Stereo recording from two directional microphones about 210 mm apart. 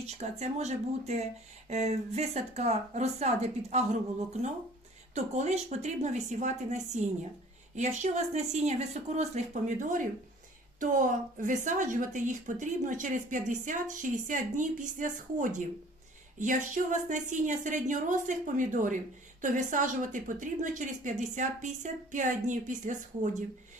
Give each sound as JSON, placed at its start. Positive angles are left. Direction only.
{"t": 0.1, "sound": "a woman's voice", "side_deg": -30}
{"t": 5.1, "sound": "a woman's voice", "side_deg": -30}